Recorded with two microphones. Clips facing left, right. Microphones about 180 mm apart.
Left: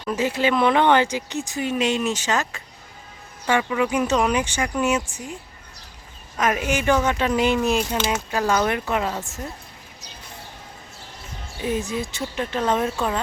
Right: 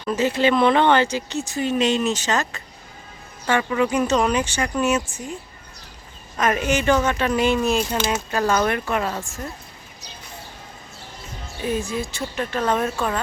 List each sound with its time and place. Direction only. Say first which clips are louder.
0.1 s speech: right 2 dB; 10° left (ahead or behind)
6.3 s speech: right 2 dB; 10° left (ahead or behind)
11.6 s speech: even; 20° left (ahead or behind)